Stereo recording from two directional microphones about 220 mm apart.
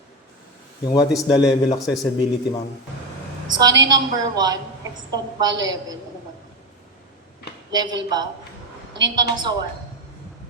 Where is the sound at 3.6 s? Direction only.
20° right (ahead or behind).